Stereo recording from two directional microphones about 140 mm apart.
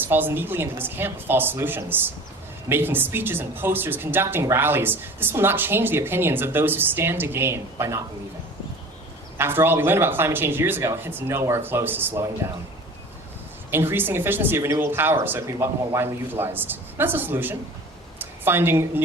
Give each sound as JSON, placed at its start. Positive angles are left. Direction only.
{"t": 0.0, "sound": "speech", "side_deg": -15}
{"t": 9.4, "sound": "speech", "side_deg": -15}
{"t": 13.7, "sound": "speech", "side_deg": -15}